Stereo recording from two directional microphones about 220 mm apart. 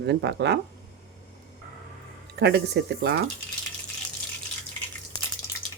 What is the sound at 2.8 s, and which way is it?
Speech, 50° right (ahead or behind).